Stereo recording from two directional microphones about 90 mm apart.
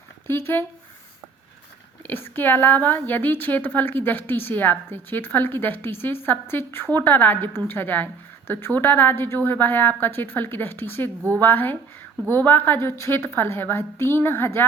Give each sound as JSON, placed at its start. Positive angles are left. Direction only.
{"t": 0.3, "sound": "a woman's voice", "side_deg": 30}
{"t": 2.0, "sound": "a woman's voice", "side_deg": 25}